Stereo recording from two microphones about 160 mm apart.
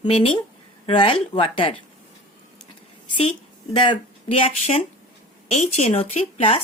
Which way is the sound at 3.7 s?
30° left (ahead or behind).